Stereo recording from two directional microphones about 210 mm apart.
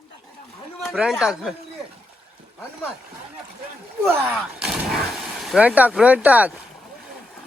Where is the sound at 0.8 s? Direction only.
Centre (ahead or behind).